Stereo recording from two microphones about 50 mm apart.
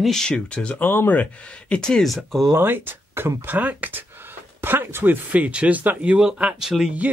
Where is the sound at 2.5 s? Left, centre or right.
Right.